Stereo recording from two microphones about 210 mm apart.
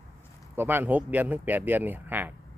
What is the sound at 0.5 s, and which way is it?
A man's voice, 10° right (ahead or behind).